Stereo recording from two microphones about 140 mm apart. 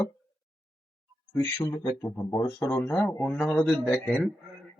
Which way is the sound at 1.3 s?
25° left (ahead or behind).